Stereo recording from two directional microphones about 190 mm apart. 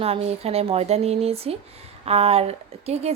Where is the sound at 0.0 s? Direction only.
30° right (ahead or behind).